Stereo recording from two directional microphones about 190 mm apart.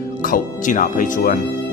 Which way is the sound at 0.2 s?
45° left (ahead or behind).